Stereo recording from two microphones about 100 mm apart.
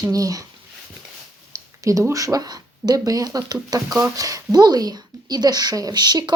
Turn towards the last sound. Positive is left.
turn(degrees=-45)  # may be behind; listen again after turning